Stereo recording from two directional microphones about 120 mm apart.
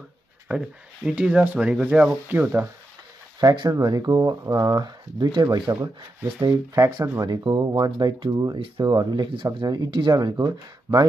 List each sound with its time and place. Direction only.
0.5 s speech: 10° right (ahead or behind)
3.3 s speech: 35° right (ahead or behind)